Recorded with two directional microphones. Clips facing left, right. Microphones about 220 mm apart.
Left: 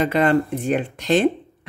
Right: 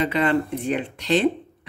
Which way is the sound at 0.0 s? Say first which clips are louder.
Left 3 dB; 45° left (ahead or behind).